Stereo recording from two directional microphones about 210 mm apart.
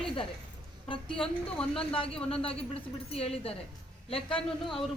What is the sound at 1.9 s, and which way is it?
A woman's voice, 25° left (ahead or behind).